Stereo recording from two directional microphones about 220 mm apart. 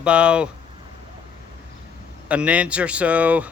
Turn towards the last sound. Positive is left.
turn(degrees=-5)  # may be behind; listen again after turning